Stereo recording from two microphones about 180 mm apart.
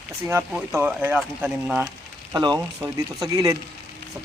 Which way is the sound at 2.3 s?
20° right (ahead or behind).